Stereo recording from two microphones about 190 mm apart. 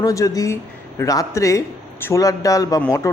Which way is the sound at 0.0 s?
15° left (ahead or behind).